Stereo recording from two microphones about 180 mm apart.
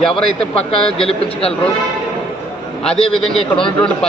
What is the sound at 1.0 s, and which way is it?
Speech, 35° left (ahead or behind).